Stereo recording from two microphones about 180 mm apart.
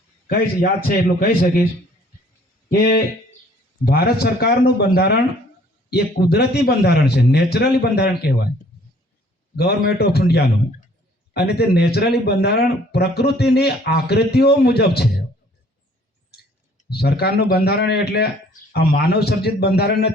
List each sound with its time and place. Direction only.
0.3 s speech: 55° left (ahead or behind)
3.8 s speech: 60° left (ahead or behind)
9.6 s speech: 60° left (ahead or behind)
16.9 s speech: 65° left (ahead or behind)